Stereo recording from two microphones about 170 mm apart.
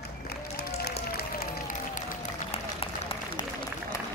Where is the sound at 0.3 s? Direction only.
70° left (ahead or behind).